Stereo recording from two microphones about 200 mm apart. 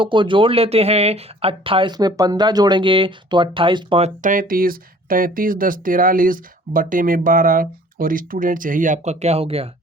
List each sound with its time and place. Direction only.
0.0 s speech: 25° right (ahead or behind)